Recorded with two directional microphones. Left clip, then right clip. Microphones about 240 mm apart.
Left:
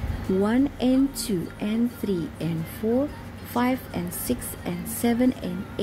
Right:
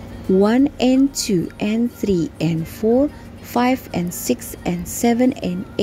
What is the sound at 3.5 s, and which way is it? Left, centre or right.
A woman's voice, right.